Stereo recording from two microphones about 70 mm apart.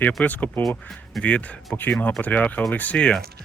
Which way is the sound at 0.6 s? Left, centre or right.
Centre.